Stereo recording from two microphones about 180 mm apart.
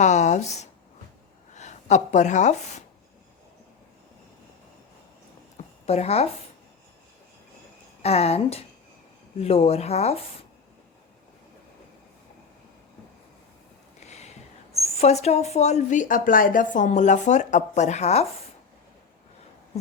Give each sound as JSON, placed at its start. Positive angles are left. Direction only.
{"t": 0.0, "sound": "a sound", "side_deg": 40}
{"t": 1.5, "sound": "speech", "side_deg": 40}
{"t": 5.8, "sound": "speech", "side_deg": 35}
{"t": 8.0, "sound": "speech", "side_deg": 35}
{"t": 14.0, "sound": "a sound", "side_deg": 40}
{"t": 14.7, "sound": "speech", "side_deg": 35}